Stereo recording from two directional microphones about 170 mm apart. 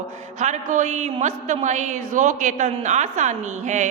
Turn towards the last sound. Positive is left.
turn(degrees=-45)  # may be behind; listen again after turning